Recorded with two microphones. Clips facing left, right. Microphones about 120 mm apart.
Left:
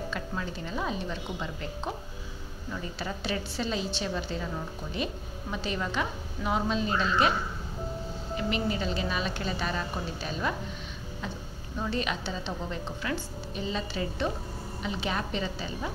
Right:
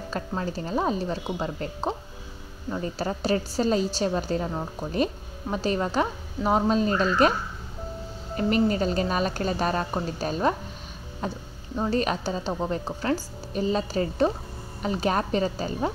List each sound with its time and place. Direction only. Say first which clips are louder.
0.1 s a woman's voice: right 5 dB; 40° right (ahead or behind)
8.4 s a woman's voice: right 8 dB; 45° right (ahead or behind)